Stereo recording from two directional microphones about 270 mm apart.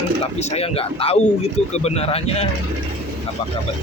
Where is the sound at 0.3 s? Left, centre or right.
Left.